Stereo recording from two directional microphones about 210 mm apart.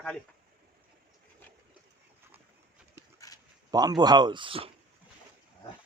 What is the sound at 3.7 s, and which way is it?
Speech, 20° right (ahead or behind).